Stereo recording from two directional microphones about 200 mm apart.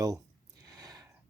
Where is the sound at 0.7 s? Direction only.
20° right (ahead or behind).